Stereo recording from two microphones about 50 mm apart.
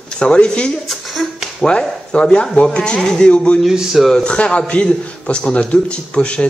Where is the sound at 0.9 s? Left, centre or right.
Centre.